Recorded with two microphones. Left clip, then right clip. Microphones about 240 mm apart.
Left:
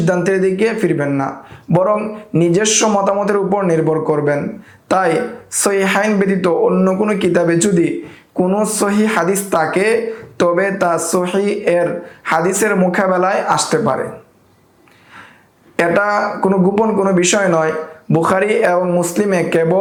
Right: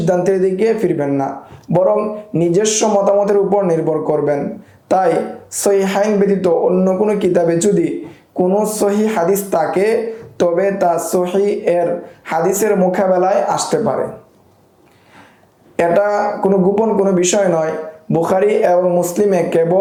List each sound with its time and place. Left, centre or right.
0.0 s speech: left
15.7 s speech: left